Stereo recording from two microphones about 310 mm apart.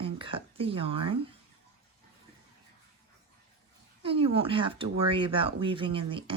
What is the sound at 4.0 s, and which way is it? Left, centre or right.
Speech, centre.